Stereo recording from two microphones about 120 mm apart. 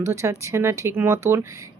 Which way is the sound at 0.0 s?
25° right (ahead or behind).